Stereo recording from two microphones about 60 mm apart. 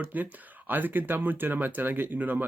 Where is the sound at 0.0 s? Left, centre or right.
Right.